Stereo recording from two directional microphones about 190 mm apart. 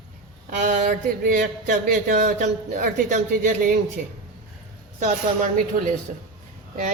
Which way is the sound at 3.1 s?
45° right (ahead or behind).